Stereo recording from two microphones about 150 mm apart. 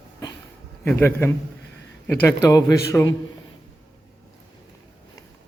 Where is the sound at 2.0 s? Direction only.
15° left (ahead or behind).